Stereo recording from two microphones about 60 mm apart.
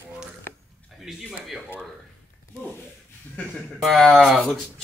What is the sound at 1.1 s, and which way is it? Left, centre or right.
Speech, centre.